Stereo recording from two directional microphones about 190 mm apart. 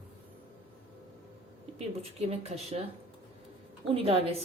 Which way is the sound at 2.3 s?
35° right (ahead or behind).